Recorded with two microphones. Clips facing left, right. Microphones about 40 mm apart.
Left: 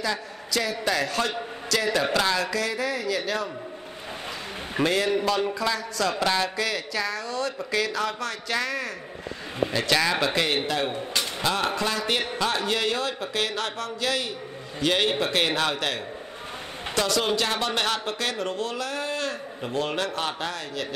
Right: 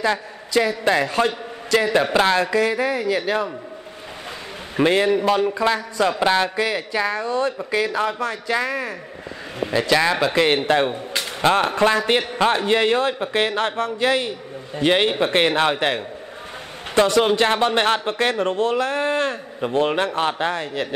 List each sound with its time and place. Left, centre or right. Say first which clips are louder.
0.0 s a man's voice: right 7 dB; right
4.8 s a man's voice: right 6 dB; right
10.4 s a man's voice: right 8 dB; right